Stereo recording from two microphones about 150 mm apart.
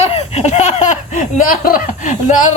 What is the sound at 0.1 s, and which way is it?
Laughter, 45° left (ahead or behind).